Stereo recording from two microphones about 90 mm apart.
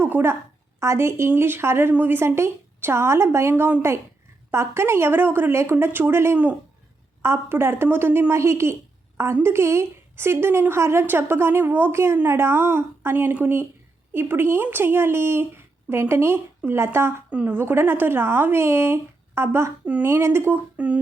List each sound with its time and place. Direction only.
0.0 s a woman's voice: 25° right (ahead or behind)
6.3 s speech: 15° right (ahead or behind)
7.2 s a woman's voice: 25° right (ahead or behind)
17.2 s a woman's voice: 20° right (ahead or behind)
19.8 s speech: 15° right (ahead or behind)
20.1 s a woman's voice: 30° right (ahead or behind)
20.7 s a sound: 15° right (ahead or behind)